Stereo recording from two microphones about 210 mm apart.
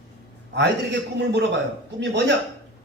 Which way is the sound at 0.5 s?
55° right (ahead or behind).